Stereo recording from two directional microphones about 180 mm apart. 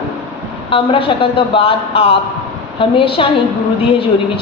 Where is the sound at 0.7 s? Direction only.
30° left (ahead or behind).